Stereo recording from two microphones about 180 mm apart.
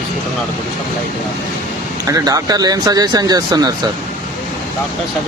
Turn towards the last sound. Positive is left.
turn(degrees=-20)  # may be behind; listen again after turning